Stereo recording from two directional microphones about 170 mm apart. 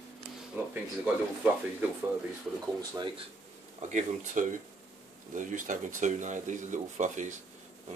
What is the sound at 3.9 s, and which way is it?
Speech, 45° right (ahead or behind).